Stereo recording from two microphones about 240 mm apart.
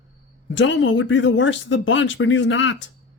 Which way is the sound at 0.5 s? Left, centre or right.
Left.